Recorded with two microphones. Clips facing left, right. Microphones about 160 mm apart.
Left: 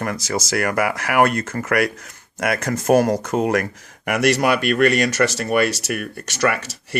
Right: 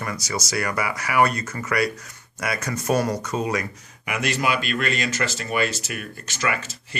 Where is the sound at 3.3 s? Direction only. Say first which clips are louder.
Left 6 dB; 65° left (ahead or behind).